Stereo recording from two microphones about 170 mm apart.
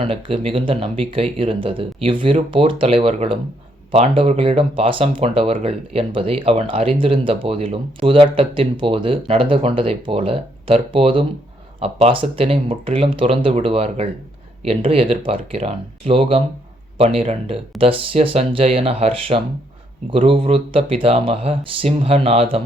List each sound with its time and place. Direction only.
0.0 s speech: 30° right (ahead or behind)